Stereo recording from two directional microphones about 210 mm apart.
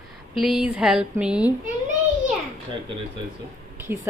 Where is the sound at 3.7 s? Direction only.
10° right (ahead or behind).